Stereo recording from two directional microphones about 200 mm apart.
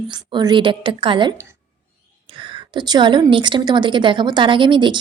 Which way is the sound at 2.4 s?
25° right (ahead or behind).